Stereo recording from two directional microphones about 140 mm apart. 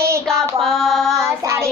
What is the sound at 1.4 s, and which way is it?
Child singing, 20° right (ahead or behind).